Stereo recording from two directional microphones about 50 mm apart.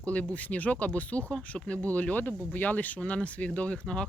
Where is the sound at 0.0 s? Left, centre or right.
Left.